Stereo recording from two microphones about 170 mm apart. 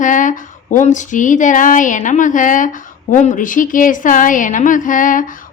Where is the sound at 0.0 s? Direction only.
50° left (ahead or behind).